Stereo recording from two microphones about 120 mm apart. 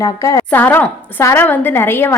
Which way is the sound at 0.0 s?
25° left (ahead or behind).